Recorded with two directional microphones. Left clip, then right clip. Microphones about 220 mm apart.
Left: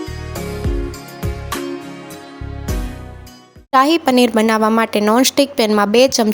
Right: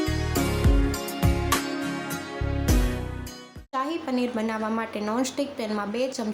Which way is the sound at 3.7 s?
45° left (ahead or behind).